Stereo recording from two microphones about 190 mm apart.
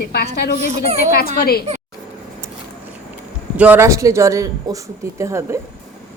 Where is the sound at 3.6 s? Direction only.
10° right (ahead or behind).